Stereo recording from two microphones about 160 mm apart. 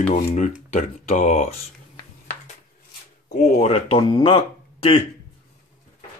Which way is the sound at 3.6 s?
40° left (ahead or behind).